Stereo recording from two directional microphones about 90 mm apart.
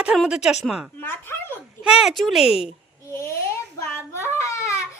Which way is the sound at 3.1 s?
30° left (ahead or behind).